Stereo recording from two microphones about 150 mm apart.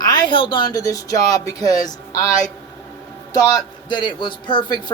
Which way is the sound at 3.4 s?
25° left (ahead or behind).